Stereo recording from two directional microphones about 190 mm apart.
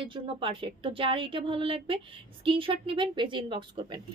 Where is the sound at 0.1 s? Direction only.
25° right (ahead or behind).